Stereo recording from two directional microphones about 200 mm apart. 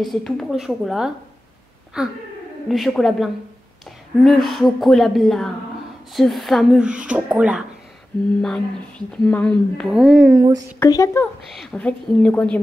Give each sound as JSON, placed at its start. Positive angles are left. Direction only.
{"t": 0.0, "sound": "speech", "side_deg": 0}
{"t": 10.3, "sound": "speech", "side_deg": -15}
{"t": 10.8, "sound": "speech", "side_deg": 15}
{"t": 11.5, "sound": "speech", "side_deg": 5}